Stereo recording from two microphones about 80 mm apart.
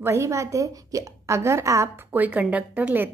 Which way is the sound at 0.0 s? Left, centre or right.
Right.